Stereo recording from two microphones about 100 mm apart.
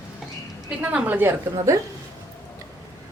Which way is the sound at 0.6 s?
15° right (ahead or behind).